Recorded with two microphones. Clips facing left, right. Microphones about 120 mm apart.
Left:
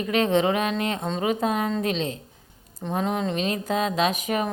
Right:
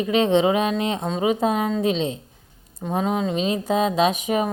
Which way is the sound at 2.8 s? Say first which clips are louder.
Right 3 dB; 10° right (ahead or behind).